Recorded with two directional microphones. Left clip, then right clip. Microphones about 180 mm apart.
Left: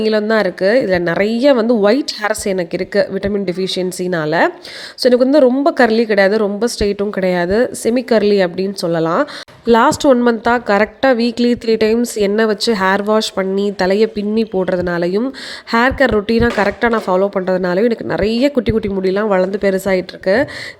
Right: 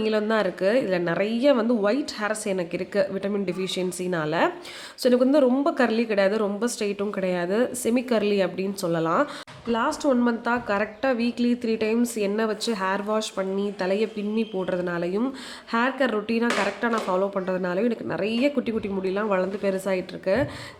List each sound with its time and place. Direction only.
0.0 s speech: 35° left (ahead or behind)
9.6 s a woman's voice: 50° left (ahead or behind)